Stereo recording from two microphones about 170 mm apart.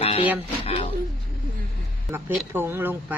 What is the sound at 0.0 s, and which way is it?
Music, 35° left (ahead or behind).